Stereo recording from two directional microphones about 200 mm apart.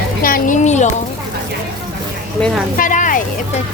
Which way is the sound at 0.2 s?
45° left (ahead or behind).